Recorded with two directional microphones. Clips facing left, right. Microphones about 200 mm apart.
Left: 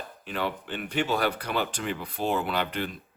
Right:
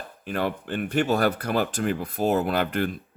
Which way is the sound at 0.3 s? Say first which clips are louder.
Right 4 dB; 50° right (ahead or behind).